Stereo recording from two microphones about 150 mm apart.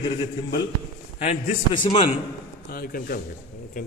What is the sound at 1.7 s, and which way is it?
Speech, 35° left (ahead or behind).